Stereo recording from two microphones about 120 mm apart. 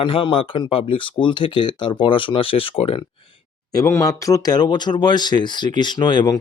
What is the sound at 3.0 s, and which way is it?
Speech, 35° left (ahead or behind).